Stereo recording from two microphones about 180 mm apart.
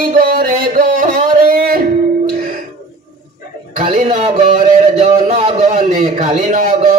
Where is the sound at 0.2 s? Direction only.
55° right (ahead or behind).